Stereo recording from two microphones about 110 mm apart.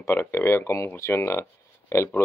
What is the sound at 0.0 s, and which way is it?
Speech, 20° left (ahead or behind).